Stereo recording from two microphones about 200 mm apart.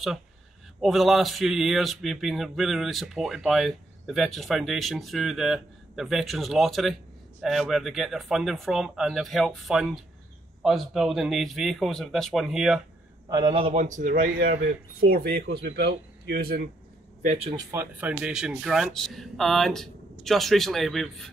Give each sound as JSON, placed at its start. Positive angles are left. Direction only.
{"t": 0.7, "sound": "speech", "side_deg": 0}
{"t": 13.3, "sound": "a man's voice", "side_deg": -25}
{"t": 17.2, "sound": "speech", "side_deg": -35}
{"t": 17.6, "sound": "speech", "side_deg": -10}